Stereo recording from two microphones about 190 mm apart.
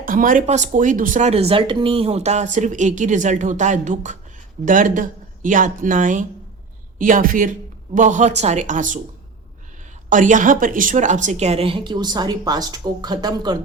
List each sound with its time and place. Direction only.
0.0 s speech: 45° right (ahead or behind)
10.1 s speech: 40° right (ahead or behind); by 13.6 s 20° right (ahead or behind)